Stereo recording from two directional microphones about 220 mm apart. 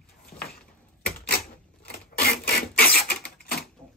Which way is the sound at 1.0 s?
45° left (ahead or behind).